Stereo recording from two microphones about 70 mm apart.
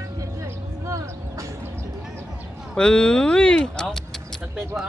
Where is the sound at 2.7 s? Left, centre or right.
Centre.